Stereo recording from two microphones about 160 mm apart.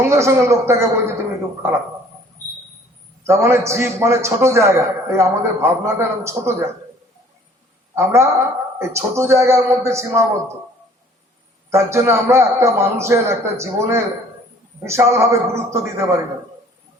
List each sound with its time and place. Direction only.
0.1 s a man's voice: 20° right (ahead or behind)
3.2 s a man's voice: 15° right (ahead or behind)
7.9 s a man's voice: 15° right (ahead or behind)
11.7 s a man's voice: 15° right (ahead or behind)